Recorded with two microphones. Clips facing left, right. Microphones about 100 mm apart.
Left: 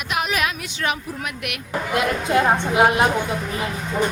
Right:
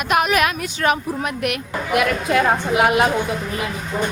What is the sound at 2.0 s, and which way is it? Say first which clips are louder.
A woman's voice: right 1 dB; 25° left (ahead or behind).